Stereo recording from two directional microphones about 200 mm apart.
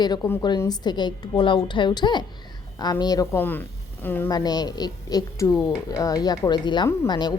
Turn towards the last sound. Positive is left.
turn(degrees=20)  # may be behind; listen again after turning